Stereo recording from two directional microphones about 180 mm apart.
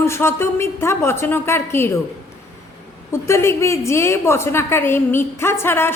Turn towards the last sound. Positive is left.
turn(degrees=15)  # may be behind; listen again after turning